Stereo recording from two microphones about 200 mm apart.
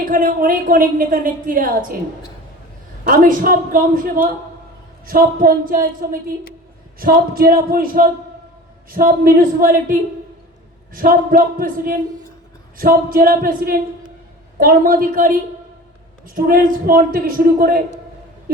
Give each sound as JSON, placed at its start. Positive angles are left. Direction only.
{"t": 0.0, "sound": "a woman's voice", "side_deg": -45}
{"t": 3.0, "sound": "a woman's voice", "side_deg": -45}